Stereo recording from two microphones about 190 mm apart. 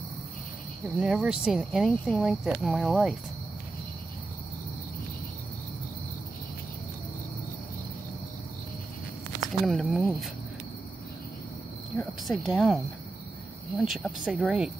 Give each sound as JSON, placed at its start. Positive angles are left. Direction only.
{"t": 0.9, "sound": "speech", "side_deg": -5}
{"t": 9.5, "sound": "speech", "side_deg": 0}
{"t": 12.0, "sound": "speech", "side_deg": 0}